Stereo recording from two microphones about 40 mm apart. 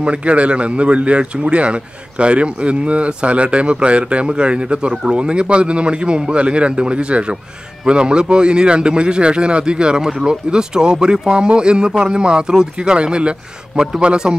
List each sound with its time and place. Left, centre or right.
0.0 s a man's voice: right